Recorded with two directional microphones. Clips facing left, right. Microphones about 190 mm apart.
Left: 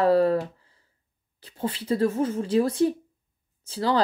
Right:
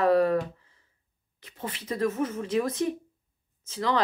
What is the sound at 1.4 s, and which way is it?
Speech, 30° left (ahead or behind).